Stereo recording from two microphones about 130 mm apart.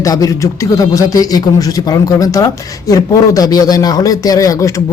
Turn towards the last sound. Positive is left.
turn(degrees=25)  # may be behind; listen again after turning